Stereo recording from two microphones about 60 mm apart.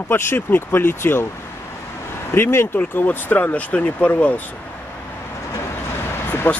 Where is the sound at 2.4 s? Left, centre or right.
Left.